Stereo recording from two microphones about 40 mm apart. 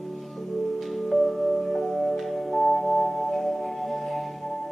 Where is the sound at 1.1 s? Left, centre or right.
Centre.